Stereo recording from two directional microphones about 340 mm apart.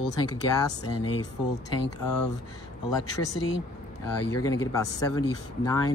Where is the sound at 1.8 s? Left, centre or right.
Left.